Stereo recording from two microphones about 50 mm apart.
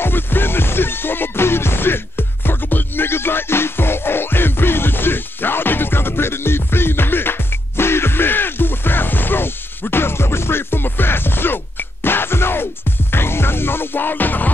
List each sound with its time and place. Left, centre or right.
0.0 s music: left